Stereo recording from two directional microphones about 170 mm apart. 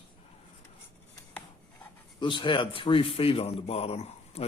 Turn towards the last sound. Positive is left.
turn(degrees=35)  # may be behind; listen again after turning